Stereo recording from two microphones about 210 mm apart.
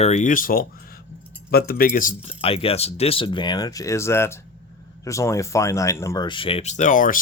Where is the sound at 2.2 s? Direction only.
25° left (ahead or behind).